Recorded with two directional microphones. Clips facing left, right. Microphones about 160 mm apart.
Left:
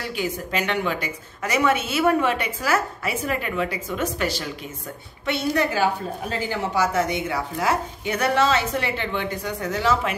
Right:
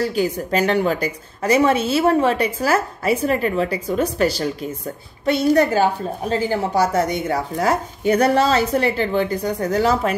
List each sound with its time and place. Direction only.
0.0 s a woman's voice: 40° right (ahead or behind)